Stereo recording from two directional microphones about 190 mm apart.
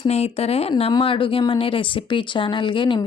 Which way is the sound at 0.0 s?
30° left (ahead or behind).